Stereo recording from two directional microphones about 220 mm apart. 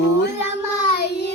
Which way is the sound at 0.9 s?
45° left (ahead or behind).